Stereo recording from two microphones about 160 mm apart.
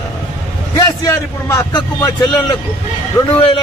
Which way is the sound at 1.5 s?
25° left (ahead or behind).